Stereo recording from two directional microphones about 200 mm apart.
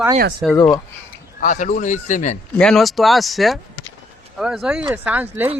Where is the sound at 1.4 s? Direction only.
40° left (ahead or behind).